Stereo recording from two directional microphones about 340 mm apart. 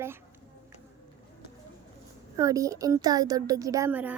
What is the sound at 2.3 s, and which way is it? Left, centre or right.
Speech, centre.